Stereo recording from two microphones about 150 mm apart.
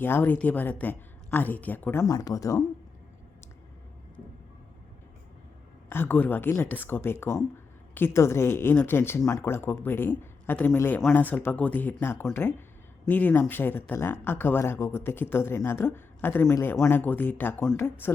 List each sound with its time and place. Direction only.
0.0 s speech: 15° left (ahead or behind)
5.9 s speech: 15° left (ahead or behind)